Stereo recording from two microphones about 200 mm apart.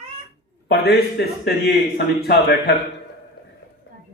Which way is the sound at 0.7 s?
55° left (ahead or behind).